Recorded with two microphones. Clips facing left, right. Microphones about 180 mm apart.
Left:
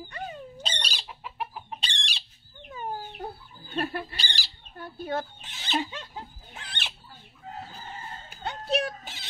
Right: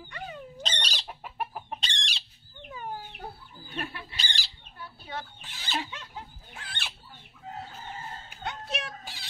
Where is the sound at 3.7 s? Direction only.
40° left (ahead or behind).